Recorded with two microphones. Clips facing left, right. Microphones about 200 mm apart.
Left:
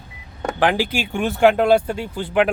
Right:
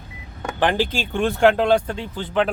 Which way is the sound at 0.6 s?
10° left (ahead or behind).